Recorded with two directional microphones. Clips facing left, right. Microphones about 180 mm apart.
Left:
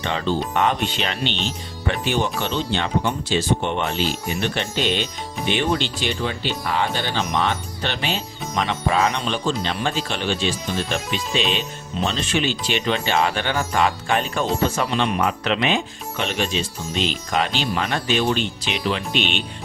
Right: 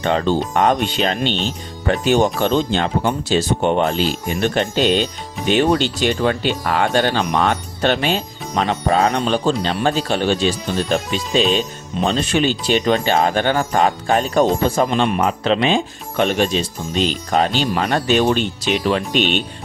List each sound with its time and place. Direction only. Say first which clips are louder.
0.0 s speech: right 5 dB; 45° right (ahead or behind)
15.2 s speech: right 4 dB; 30° right (ahead or behind)
16.1 s speech: right 7 dB; 50° right (ahead or behind)